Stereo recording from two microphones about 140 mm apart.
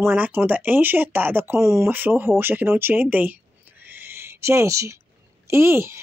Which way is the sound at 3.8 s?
15° right (ahead or behind).